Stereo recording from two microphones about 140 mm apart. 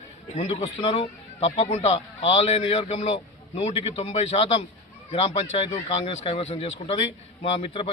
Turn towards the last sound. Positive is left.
turn(degrees=40)  # may be behind; listen again after turning